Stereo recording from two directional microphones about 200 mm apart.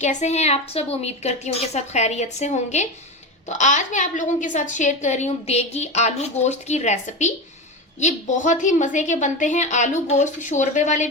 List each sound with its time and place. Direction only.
0.0 s a woman's voice: 35° left (ahead or behind)